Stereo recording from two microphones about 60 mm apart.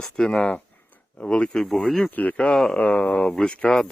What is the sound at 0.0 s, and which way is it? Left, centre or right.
Speech, centre.